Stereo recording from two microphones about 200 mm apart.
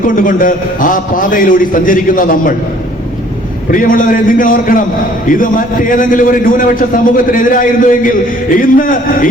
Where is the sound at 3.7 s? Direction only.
45° left (ahead or behind).